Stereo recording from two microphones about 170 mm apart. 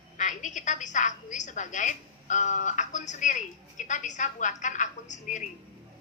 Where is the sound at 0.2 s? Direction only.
45° left (ahead or behind).